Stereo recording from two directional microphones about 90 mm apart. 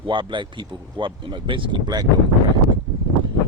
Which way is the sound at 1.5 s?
65° right (ahead or behind).